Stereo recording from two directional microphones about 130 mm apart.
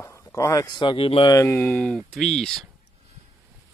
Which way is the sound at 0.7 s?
40° left (ahead or behind).